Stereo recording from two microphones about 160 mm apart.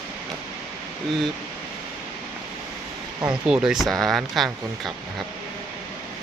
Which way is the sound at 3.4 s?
5° right (ahead or behind).